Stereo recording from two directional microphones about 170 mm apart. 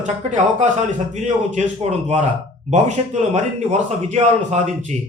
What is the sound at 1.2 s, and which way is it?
A man's voice, 40° right (ahead or behind).